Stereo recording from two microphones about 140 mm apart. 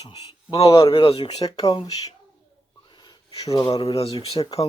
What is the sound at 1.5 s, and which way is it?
Speech, 25° left (ahead or behind).